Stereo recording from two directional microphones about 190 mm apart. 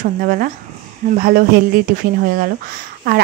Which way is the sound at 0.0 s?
50° right (ahead or behind).